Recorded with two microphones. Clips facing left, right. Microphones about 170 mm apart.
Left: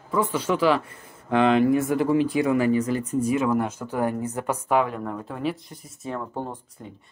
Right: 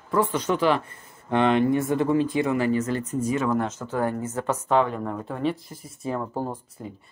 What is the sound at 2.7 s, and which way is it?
Speech, 10° left (ahead or behind).